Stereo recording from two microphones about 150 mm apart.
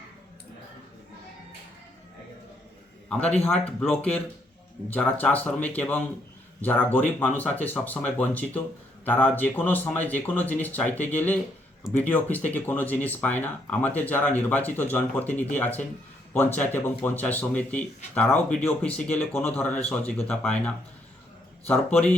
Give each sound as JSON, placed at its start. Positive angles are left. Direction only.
{"t": 3.8, "sound": "speech", "side_deg": 10}